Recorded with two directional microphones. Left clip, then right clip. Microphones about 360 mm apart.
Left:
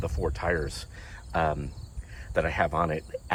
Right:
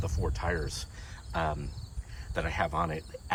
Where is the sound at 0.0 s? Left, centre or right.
Centre.